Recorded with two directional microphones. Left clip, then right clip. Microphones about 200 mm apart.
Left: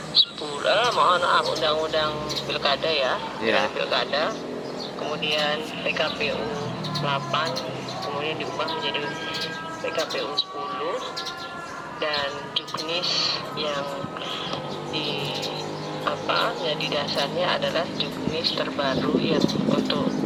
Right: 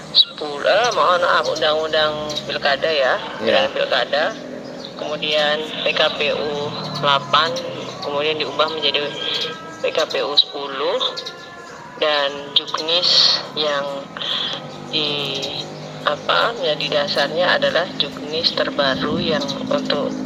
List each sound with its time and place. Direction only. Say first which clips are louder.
0.6 s speech: right 4 dB; 20° right (ahead or behind)
5.1 s speech: right 7 dB; 35° right (ahead or behind)
11.9 s speech: right 8 dB; 45° right (ahead or behind)
14.3 s music: right 11 dB; 40° right (ahead or behind)
14.9 s speech: right 8 dB; 40° right (ahead or behind)